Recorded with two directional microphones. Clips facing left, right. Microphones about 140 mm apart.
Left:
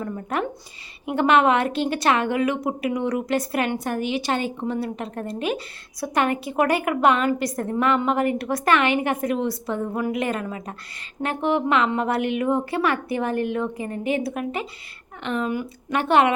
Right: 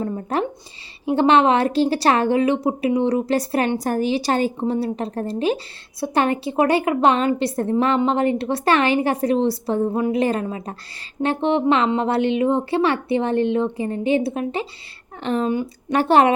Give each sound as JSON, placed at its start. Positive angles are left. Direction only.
{"t": 0.0, "sound": "a woman's voice", "side_deg": -30}